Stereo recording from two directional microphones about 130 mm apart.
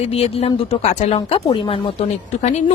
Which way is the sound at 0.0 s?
50° left (ahead or behind).